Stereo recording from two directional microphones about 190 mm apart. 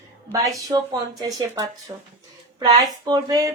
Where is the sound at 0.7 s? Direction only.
25° right (ahead or behind).